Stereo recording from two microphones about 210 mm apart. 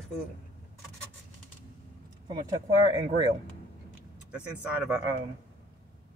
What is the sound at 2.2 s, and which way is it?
Speech, 20° right (ahead or behind).